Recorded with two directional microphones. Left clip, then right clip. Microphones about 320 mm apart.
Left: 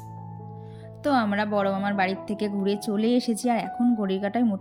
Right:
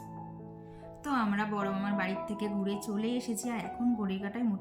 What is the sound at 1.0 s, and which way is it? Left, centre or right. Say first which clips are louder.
Speech: left 8 dB; centre.